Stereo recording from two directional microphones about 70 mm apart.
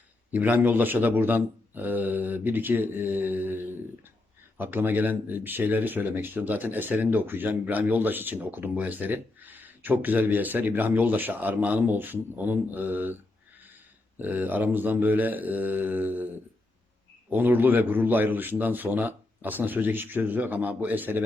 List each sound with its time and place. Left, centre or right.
0.3 s speech: right
14.2 s speech: right